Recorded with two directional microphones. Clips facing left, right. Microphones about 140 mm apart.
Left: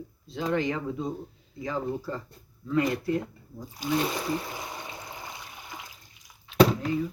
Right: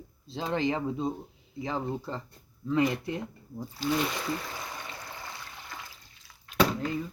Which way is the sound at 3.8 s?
15° left (ahead or behind).